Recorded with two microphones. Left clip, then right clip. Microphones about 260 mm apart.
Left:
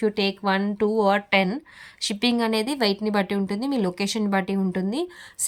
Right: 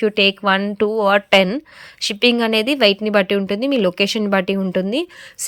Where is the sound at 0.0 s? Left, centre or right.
Centre.